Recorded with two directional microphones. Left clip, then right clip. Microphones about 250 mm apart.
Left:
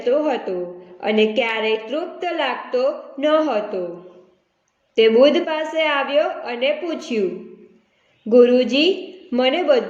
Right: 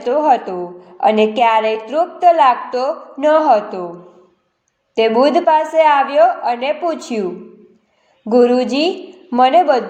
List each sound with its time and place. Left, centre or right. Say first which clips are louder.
0.0 s a woman's voice: right 5 dB; centre
4.9 s a woman's voice: right 1 dB; centre
8.3 s a woman's voice: right 1 dB; centre